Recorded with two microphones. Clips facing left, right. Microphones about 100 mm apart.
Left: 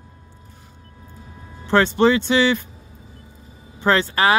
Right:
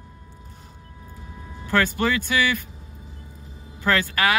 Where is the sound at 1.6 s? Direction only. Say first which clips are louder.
Left 6 dB; 25° left (ahead or behind).